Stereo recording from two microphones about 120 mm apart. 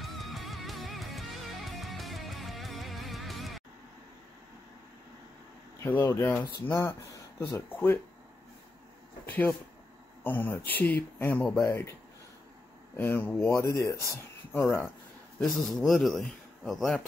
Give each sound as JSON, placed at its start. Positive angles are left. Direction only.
{"t": 0.0, "sound": "music", "side_deg": 0}
{"t": 5.8, "sound": "speech", "side_deg": 20}
{"t": 9.2, "sound": "speech", "side_deg": 15}
{"t": 11.6, "sound": "speech", "side_deg": 20}
{"t": 12.9, "sound": "speech", "side_deg": 15}
{"t": 15.4, "sound": "a man's voice", "side_deg": 0}